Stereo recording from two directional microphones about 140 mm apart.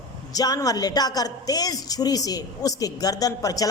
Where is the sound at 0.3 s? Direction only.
25° left (ahead or behind).